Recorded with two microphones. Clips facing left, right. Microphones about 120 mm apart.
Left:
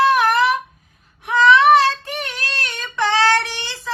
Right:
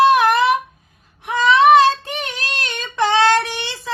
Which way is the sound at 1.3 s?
20° right (ahead or behind).